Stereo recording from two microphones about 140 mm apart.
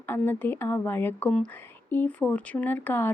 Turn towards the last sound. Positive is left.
turn(degrees=15)  # may be behind; listen again after turning